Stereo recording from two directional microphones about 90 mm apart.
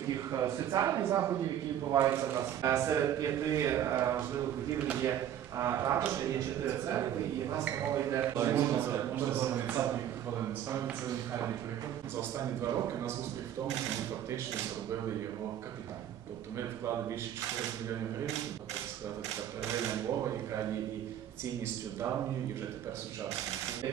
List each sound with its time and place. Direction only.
0.3 s a man's voice: 40° right (ahead or behind)
8.2 s a man's voice: 30° right (ahead or behind)